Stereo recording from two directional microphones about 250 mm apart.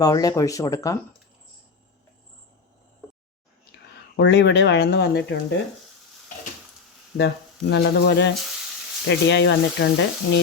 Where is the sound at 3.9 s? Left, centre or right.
Left.